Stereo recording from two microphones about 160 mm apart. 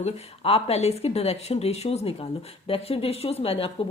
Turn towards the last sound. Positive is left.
turn(degrees=35)  # may be behind; listen again after turning